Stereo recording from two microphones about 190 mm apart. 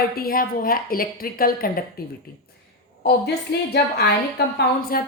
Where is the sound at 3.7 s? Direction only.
55° left (ahead or behind).